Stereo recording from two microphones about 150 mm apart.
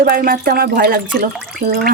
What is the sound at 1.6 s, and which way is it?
Speech, 90° right.